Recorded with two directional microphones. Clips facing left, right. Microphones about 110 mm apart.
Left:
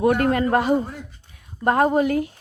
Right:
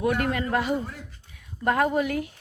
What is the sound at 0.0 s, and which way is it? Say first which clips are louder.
Speech: left 6 dB; 40° left (ahead or behind).